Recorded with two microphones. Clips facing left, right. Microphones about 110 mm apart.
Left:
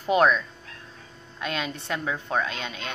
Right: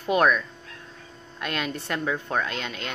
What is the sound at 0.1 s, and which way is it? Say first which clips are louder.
Speech: left 1 dB; 25° left (ahead or behind).